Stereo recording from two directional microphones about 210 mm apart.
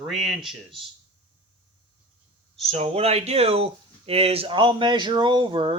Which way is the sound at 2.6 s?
30° right (ahead or behind).